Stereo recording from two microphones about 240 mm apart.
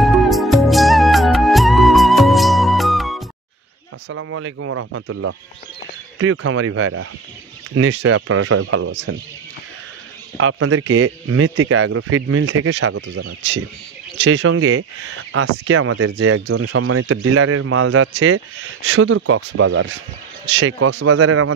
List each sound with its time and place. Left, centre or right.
0.0 s music: centre
4.1 s speech: right
7.7 s speech: right
8.1 s speech: right
10.3 s speech: right
13.0 s speech: right